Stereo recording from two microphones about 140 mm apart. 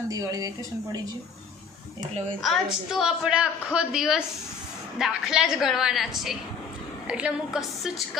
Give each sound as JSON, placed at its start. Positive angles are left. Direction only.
{"t": 0.1, "sound": "speech", "side_deg": -25}
{"t": 2.4, "sound": "a woman's voice", "side_deg": 0}